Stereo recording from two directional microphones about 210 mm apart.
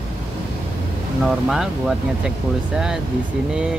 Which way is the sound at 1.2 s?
Centre (ahead or behind).